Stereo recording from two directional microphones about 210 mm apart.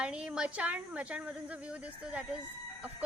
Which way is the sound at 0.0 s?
5° right (ahead or behind).